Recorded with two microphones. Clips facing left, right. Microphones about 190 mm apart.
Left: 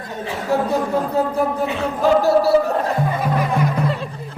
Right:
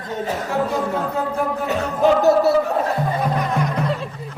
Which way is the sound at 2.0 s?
20° right (ahead or behind).